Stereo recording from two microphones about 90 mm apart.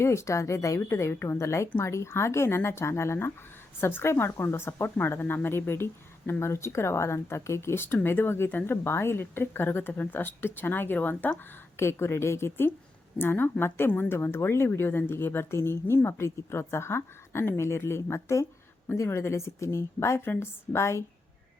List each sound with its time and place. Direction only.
0.0 s a woman's voice: 30° left (ahead or behind)